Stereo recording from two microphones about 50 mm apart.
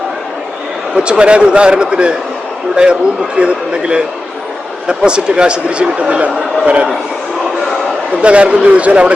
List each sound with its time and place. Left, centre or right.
0.9 s a man's voice: centre
8.2 s a man's voice: right